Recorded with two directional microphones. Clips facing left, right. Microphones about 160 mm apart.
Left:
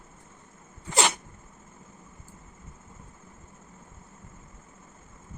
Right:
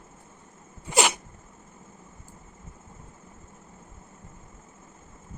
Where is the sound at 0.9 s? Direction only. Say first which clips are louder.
Right 2 dB; 10° right (ahead or behind).